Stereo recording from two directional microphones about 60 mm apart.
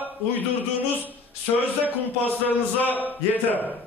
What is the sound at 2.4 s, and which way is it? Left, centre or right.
A man's voice, left.